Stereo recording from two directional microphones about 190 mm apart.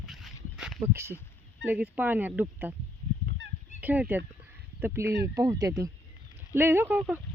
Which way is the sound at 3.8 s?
10° right (ahead or behind).